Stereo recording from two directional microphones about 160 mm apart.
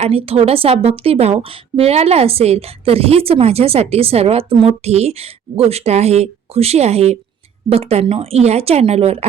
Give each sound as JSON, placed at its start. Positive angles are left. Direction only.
{"t": 0.0, "sound": "a woman's voice", "side_deg": -35}